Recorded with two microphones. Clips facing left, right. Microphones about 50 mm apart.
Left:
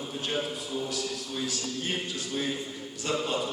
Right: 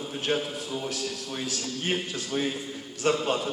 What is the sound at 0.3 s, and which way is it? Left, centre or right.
A man's voice, right.